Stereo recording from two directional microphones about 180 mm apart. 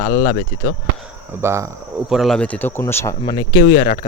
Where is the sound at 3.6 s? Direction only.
60° left (ahead or behind).